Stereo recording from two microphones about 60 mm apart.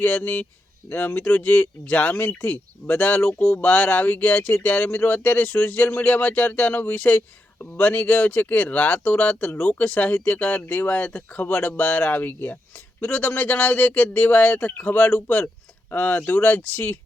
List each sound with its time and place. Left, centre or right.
0.0 s speech: left